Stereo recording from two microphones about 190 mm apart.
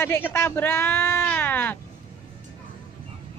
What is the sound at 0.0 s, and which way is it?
Speech, 10° left (ahead or behind).